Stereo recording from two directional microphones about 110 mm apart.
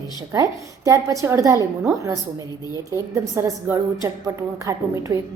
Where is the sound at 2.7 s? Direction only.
25° right (ahead or behind).